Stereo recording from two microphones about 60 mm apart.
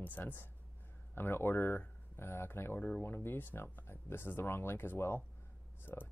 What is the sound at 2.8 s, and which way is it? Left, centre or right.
Speech, left.